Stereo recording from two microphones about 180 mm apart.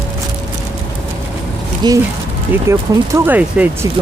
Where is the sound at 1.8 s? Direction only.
25° right (ahead or behind).